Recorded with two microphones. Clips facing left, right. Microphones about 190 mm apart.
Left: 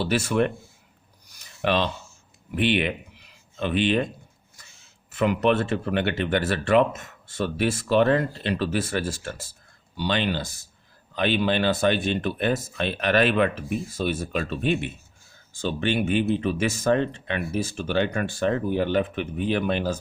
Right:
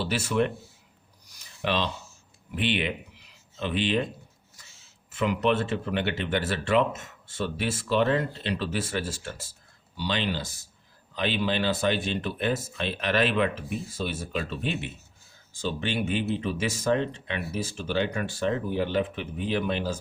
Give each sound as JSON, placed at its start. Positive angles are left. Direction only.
{"t": 0.0, "sound": "speech", "side_deg": 55}
{"t": 1.3, "sound": "a sound", "side_deg": 55}
{"t": 2.6, "sound": "speech", "side_deg": 55}
{"t": 5.1, "sound": "speech", "side_deg": 55}